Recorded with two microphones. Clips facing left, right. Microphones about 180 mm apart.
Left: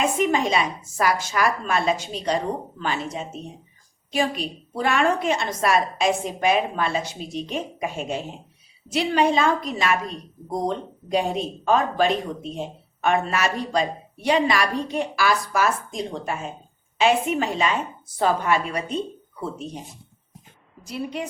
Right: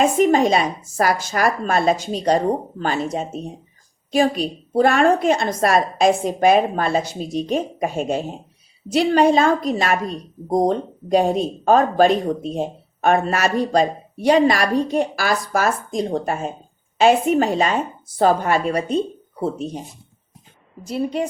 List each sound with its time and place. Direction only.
0.0 s a woman's voice: 40° right (ahead or behind)
20.8 s a woman's voice: 30° right (ahead or behind)